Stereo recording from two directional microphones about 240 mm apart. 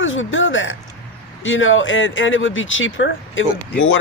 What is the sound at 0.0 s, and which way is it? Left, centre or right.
A man's voice, left.